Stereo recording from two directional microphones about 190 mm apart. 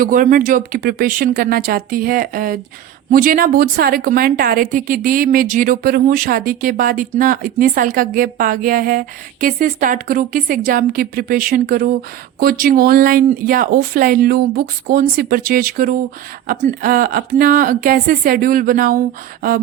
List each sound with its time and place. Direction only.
0.0 s speech: 45° right (ahead or behind)